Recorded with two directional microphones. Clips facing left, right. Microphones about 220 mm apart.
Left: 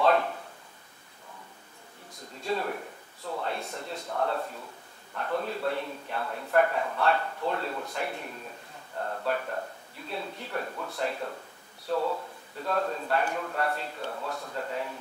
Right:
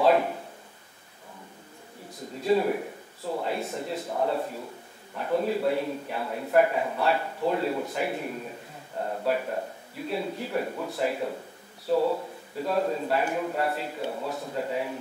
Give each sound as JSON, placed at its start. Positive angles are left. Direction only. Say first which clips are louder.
{"t": 0.0, "sound": "a sound", "louder": "right 3 dB", "side_deg": -10}
{"t": 2.4, "sound": "a man's voice", "louder": "right 8 dB", "side_deg": -10}
{"t": 3.5, "sound": "a man's voice", "louder": "right 5 dB", "side_deg": -5}